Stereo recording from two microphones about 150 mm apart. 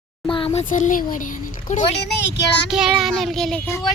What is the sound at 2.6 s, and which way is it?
Speech, 5° right (ahead or behind).